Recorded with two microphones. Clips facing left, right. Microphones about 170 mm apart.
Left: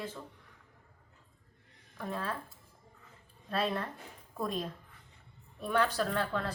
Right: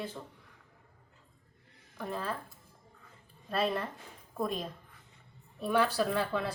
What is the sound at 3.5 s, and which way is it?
A woman's voice, centre (ahead or behind).